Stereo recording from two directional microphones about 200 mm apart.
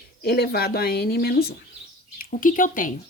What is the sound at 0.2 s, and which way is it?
Speech, 50° left (ahead or behind).